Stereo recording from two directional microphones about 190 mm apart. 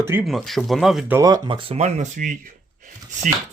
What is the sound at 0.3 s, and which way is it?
Speech, centre (ahead or behind).